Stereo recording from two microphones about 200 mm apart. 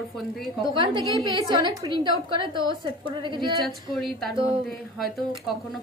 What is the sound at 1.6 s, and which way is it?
A woman's voice, 20° right (ahead or behind).